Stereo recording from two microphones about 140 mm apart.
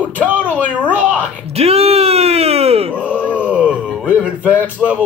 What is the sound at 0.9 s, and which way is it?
Speech, 10° right (ahead or behind).